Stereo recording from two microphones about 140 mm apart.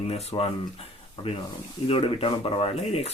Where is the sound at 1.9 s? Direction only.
40° left (ahead or behind).